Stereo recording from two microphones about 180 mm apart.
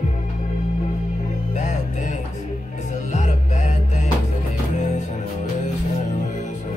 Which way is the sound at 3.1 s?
40° left (ahead or behind).